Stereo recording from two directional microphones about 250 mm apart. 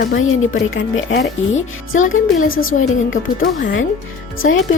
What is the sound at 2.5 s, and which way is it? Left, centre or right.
A woman's voice, left.